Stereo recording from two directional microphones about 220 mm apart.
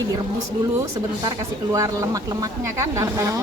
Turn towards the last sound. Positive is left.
turn(degrees=-15)  # may be behind; listen again after turning